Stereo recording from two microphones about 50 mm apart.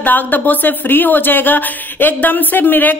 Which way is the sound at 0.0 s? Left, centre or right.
Left.